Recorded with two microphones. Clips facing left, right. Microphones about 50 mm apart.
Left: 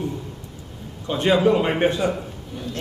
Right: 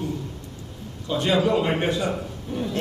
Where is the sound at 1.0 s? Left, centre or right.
Left.